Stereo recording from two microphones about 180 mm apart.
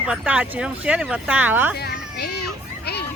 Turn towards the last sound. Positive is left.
turn(degrees=65)  # may be behind; listen again after turning